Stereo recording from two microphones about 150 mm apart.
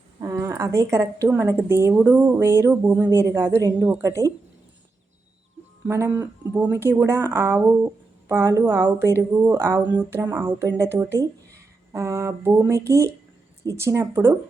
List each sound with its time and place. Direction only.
0.2 s speech: 20° right (ahead or behind)
5.9 s speech: 15° right (ahead or behind)